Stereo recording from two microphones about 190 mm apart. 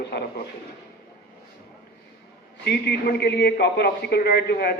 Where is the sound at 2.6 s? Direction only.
60° left (ahead or behind).